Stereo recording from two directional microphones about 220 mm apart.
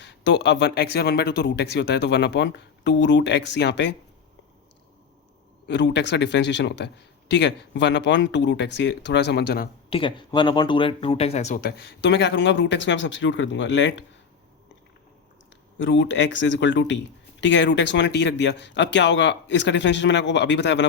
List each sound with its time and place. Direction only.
0.0 s a man's voice: 55° left (ahead or behind)
5.6 s a man's voice: 50° left (ahead or behind)
9.9 s a man's voice: 20° left (ahead or behind); by 13.9 s 55° left (ahead or behind)
15.8 s a man's voice: 55° left (ahead or behind)